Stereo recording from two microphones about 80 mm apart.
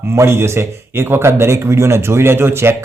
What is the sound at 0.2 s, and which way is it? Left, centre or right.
A man's voice, right.